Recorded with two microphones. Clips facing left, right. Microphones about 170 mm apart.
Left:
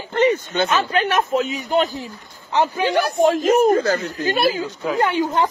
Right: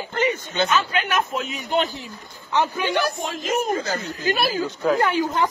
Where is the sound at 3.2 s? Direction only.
55° left (ahead or behind).